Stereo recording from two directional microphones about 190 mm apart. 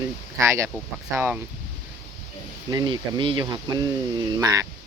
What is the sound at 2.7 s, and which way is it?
Speech, 20° right (ahead or behind).